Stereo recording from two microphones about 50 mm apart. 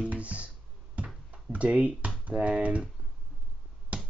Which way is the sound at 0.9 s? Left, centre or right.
Right.